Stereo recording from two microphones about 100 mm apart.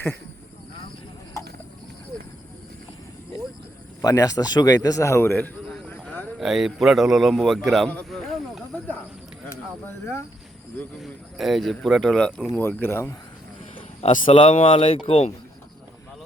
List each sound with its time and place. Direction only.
4.0 s a man's voice: 35° left (ahead or behind); by 5.5 s 20° left (ahead or behind)
5.6 s a sound: 5° left (ahead or behind)
6.4 s a man's voice: 5° right (ahead or behind)
8.1 s snake: centre (ahead or behind)
9.5 s speech: 25° left (ahead or behind)
11.0 s a man's voice: centre (ahead or behind)
12.5 s speech: 20° left (ahead or behind)
14.0 s speech: 60° left (ahead or behind); by 15.3 s 80° left